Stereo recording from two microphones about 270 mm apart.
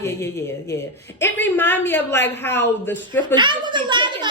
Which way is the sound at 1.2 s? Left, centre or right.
Centre.